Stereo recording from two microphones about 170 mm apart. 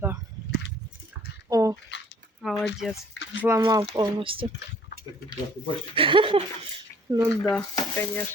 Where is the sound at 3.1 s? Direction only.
90° left.